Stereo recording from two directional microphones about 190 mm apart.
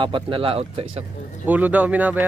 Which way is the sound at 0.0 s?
25° right (ahead or behind).